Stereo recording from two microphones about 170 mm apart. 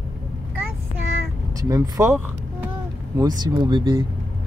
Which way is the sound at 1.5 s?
20° right (ahead or behind).